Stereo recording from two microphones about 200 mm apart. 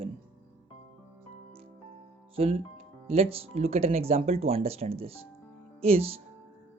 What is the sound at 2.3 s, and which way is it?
Speech, 30° right (ahead or behind).